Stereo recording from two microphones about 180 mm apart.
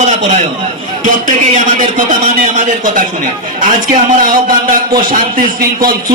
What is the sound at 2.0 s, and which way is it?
A man's voice, 45° right (ahead or behind).